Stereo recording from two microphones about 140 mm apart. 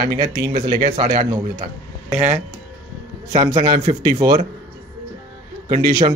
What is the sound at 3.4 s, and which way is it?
Speech, 30° right (ahead or behind).